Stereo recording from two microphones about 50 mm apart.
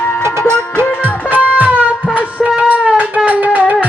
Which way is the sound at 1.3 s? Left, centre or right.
Right.